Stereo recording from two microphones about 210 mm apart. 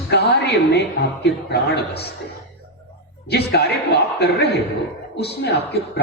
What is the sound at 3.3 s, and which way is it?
Speech, 50° left (ahead or behind).